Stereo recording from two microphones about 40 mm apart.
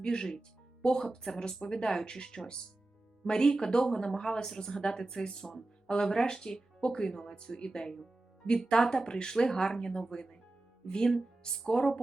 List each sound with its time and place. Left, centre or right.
0.0 s speech: centre